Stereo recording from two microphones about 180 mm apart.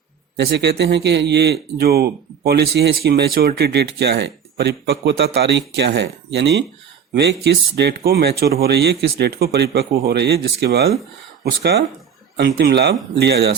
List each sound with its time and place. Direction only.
0.3 s a man's voice: 70° right (ahead or behind)
12.4 s speech: 65° right (ahead or behind)